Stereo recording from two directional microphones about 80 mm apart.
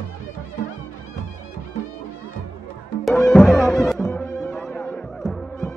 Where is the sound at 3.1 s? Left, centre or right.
Centre.